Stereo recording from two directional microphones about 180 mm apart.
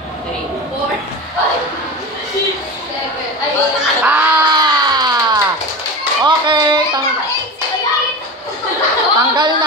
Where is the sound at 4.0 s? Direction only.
10° right (ahead or behind).